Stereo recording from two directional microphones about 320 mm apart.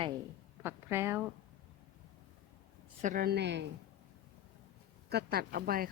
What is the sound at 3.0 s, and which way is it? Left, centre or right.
Speech, right.